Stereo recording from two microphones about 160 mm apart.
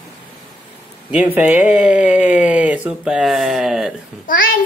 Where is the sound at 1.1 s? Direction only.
10° right (ahead or behind).